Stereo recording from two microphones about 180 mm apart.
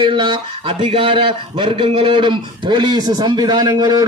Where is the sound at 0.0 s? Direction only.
25° right (ahead or behind).